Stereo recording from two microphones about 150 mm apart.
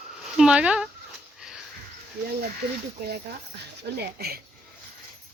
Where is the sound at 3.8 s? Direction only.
90° right.